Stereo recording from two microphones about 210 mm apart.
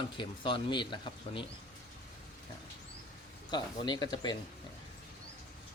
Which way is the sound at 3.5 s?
20° left (ahead or behind).